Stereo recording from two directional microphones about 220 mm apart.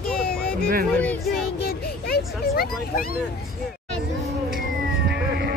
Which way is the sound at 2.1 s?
45° left (ahead or behind).